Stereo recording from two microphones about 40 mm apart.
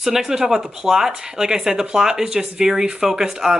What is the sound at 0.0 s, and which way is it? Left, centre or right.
Speech, centre.